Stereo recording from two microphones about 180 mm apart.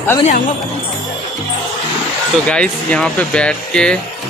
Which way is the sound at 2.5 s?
5° left (ahead or behind).